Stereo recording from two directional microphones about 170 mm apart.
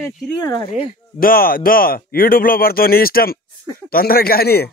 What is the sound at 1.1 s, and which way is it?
Speech, 60° left (ahead or behind).